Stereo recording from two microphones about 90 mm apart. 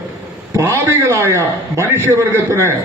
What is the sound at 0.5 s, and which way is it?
A man's voice, 30° right (ahead or behind).